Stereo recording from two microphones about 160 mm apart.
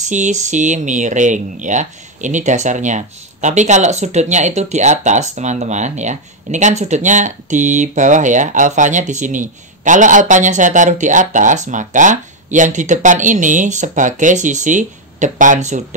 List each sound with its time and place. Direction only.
0.1 s speech: 50° right (ahead or behind)